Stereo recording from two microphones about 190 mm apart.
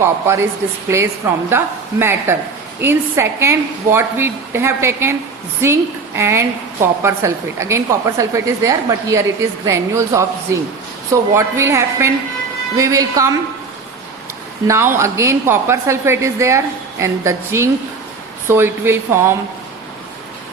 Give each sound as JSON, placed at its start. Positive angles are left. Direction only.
{"t": 0.0, "sound": "a woman's voice", "side_deg": -15}
{"t": 1.5, "sound": "a woman's voice", "side_deg": -10}
{"t": 14.7, "sound": "a woman's voice", "side_deg": -15}